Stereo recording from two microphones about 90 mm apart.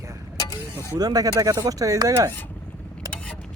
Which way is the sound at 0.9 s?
45° right (ahead or behind).